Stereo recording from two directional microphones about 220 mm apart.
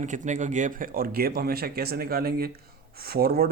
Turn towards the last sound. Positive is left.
turn(degrees=-45)  # may be behind; listen again after turning